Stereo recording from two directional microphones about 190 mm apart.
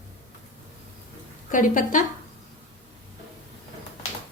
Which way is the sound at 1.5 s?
45° left (ahead or behind).